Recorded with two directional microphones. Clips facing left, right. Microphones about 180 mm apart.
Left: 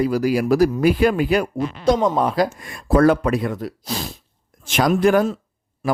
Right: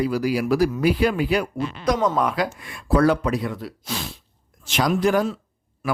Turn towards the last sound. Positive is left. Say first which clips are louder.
# left 4 dB
turn(degrees=50)  # may be behind; listen again after turning